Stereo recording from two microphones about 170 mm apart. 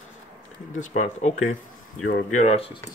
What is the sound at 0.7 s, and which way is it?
Speech, 45° left (ahead or behind).